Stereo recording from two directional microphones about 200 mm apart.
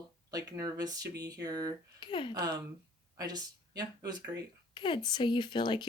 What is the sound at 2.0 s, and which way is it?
Speech, 25° left (ahead or behind).